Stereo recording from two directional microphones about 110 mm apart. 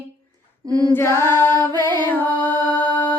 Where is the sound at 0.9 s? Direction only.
20° left (ahead or behind).